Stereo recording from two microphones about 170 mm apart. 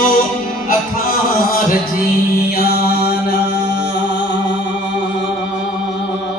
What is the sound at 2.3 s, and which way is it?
Mantra, 65° left (ahead or behind).